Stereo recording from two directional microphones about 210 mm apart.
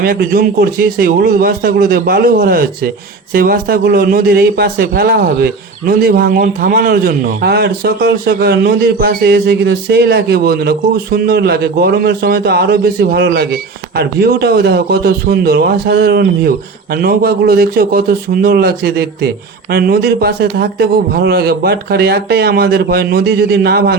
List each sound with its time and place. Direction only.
0.0 s a man's voice: 45° right (ahead or behind)